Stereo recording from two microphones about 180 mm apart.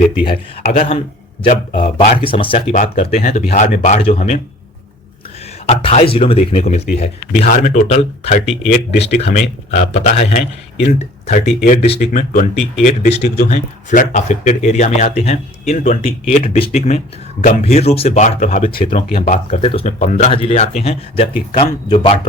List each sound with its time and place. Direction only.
0.6 s speech: 40° left (ahead or behind)
2.2 s speech: 30° left (ahead or behind)
5.6 s speech: 35° left (ahead or behind)
13.2 s speech: 50° left (ahead or behind)
18.8 s speech: 30° left (ahead or behind)